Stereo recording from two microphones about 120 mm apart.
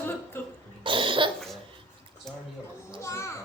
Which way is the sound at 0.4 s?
20° left (ahead or behind).